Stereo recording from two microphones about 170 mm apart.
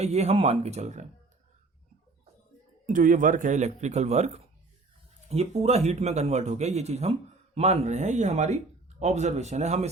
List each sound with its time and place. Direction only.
0.0 s speech: 40° right (ahead or behind)
2.8 s a man's voice: 50° right (ahead or behind)